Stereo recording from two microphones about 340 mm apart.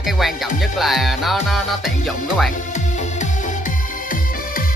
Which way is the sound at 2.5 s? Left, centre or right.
Left.